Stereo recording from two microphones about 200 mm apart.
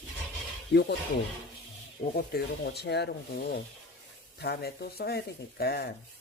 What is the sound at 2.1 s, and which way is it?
Speech, 50° left (ahead or behind).